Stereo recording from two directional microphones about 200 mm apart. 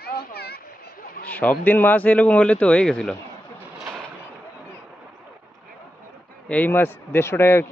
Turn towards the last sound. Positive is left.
turn(degrees=15)  # may be behind; listen again after turning